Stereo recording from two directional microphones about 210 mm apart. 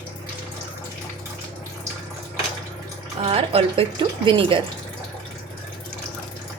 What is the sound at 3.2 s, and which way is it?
Speech, 25° right (ahead or behind).